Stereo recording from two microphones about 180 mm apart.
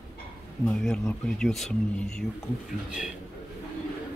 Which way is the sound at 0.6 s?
5° left (ahead or behind).